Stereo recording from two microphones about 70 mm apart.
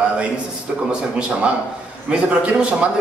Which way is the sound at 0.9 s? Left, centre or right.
Centre.